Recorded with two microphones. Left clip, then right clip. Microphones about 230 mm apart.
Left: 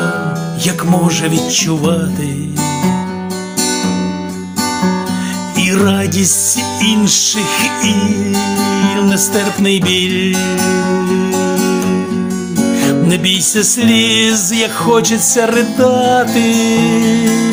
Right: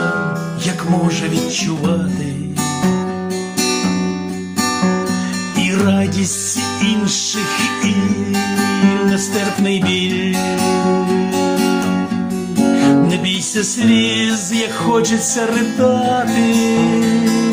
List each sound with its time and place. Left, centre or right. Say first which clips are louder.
5.5 s music: left 4 dB; left
12.7 s music: even; left